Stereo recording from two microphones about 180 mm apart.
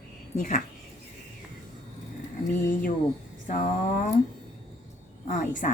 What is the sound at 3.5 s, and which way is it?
Speech, 45° left (ahead or behind).